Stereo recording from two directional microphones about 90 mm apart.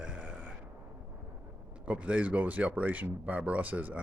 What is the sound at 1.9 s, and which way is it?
Speech, 15° right (ahead or behind).